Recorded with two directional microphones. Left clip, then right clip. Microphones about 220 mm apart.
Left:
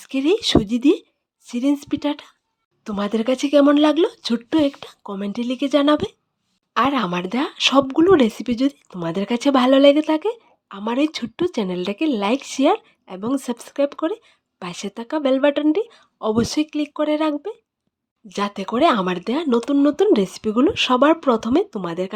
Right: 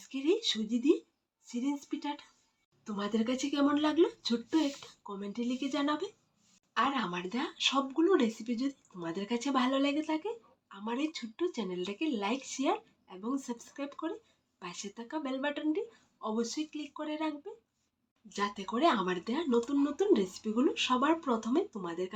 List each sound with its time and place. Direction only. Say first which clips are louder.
0.0 s speech: left 12 dB; 55° left (ahead or behind)